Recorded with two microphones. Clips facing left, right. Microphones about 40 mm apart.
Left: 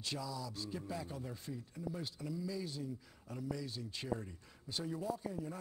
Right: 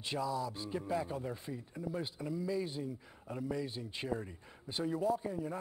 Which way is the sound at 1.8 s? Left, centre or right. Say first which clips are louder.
Right 5 dB; right.